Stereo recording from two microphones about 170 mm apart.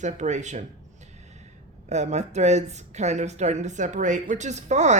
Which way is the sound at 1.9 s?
40° right (ahead or behind).